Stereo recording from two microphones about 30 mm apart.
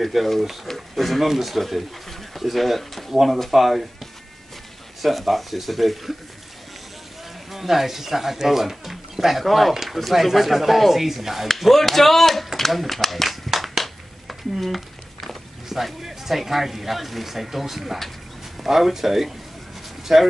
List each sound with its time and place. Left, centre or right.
0.0 s speech: centre
5.0 s speech: centre
7.5 s speech: centre
11.4 s speech: centre
13.5 s a sound: centre
15.7 s speech: centre